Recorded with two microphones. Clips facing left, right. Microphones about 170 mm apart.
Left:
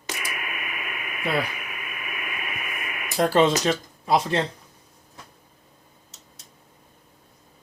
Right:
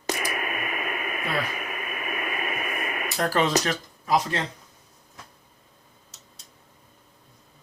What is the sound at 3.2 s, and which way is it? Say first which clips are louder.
Speech: left 4 dB; 25° left (ahead or behind).